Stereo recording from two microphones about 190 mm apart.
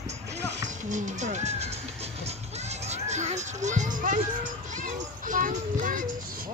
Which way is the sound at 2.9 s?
35° right (ahead or behind).